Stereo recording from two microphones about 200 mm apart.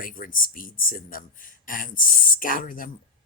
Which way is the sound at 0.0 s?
45° left (ahead or behind).